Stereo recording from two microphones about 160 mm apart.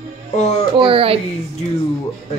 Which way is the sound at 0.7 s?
35° right (ahead or behind).